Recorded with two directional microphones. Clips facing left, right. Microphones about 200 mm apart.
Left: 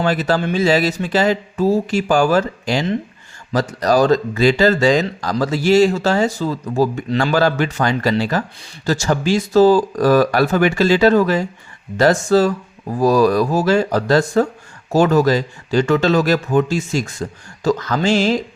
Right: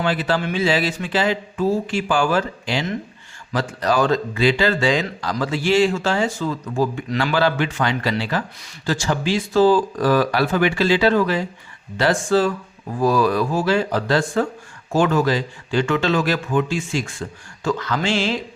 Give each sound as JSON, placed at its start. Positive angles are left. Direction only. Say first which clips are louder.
{"t": 0.0, "sound": "a man's voice", "louder": "left 3 dB", "side_deg": 40}